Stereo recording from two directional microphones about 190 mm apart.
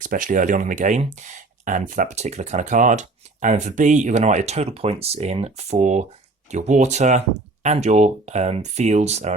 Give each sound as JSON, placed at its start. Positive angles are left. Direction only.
{"t": 0.0, "sound": "speech", "side_deg": -45}